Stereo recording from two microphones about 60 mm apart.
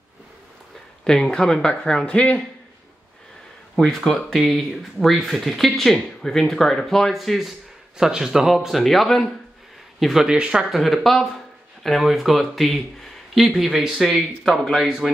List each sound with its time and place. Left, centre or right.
1.0 s speech: centre
3.7 s speech: centre
10.7 s speech: centre